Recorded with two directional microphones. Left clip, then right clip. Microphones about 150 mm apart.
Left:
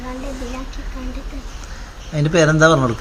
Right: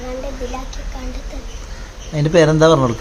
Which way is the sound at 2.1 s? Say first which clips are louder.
Right 2 dB; 10° right (ahead or behind).